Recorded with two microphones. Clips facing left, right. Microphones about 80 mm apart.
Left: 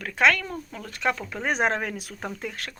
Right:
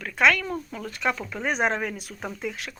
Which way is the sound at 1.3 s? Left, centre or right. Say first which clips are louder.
Even; left.